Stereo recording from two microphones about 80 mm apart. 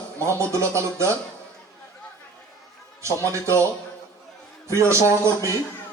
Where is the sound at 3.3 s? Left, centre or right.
Right.